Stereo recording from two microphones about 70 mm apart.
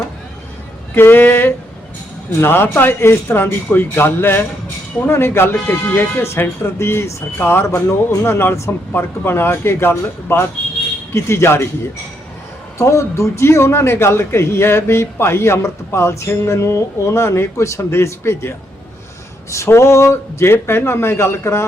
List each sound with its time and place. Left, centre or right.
0.9 s a man's voice: left
12.8 s a man's voice: left